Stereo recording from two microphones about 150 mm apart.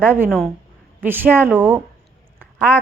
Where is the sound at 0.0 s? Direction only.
15° right (ahead or behind).